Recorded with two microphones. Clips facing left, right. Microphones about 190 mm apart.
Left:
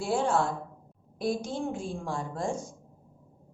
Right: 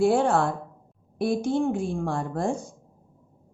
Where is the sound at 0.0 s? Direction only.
60° right (ahead or behind).